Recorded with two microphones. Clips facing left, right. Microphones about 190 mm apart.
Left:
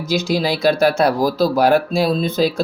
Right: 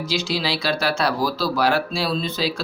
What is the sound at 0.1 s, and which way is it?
Speech, 50° left (ahead or behind).